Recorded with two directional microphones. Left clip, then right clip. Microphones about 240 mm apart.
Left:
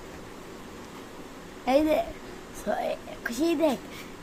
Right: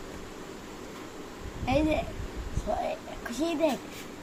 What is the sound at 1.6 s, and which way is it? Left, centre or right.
Speech, left.